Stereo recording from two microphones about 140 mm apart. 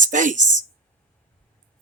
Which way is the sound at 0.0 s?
65° right (ahead or behind).